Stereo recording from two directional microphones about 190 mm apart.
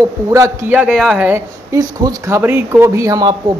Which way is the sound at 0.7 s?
Centre (ahead or behind).